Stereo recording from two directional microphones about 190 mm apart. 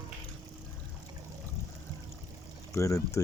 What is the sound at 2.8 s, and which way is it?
Speech, 15° left (ahead or behind).